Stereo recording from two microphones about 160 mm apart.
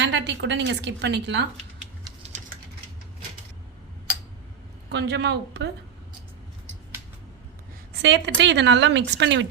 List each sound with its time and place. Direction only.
0.0 s a woman's voice: 90° right
4.9 s a woman's voice: 90° right
8.0 s a woman's voice: 90° right